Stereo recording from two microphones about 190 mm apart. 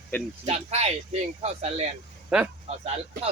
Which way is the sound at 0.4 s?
35° right (ahead or behind).